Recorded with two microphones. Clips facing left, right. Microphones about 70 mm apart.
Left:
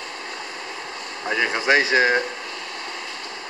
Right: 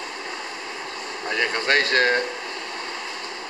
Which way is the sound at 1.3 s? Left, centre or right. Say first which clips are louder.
Left 2 dB; centre.